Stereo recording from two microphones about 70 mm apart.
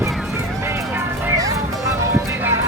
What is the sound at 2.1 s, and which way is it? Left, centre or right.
Music, right.